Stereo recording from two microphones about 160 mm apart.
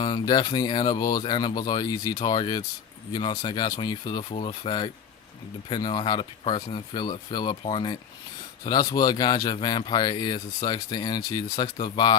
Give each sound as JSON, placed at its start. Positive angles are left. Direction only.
{"t": 0.0, "sound": "speech", "side_deg": 25}
{"t": 4.2, "sound": "speech", "side_deg": 40}